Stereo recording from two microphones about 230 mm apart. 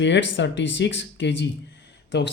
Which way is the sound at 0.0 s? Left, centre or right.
Left.